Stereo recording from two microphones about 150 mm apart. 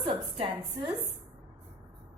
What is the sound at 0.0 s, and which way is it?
Speech, 40° right (ahead or behind).